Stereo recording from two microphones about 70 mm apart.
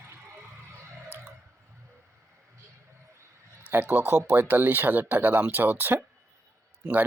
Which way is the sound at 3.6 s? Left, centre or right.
Right.